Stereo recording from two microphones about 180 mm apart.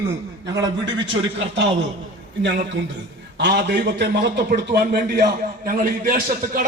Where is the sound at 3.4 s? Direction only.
70° right (ahead or behind).